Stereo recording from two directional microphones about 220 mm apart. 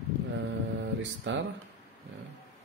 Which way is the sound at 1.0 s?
55° right (ahead or behind).